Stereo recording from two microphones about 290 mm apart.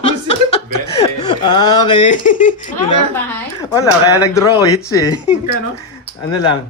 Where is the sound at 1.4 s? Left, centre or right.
Centre.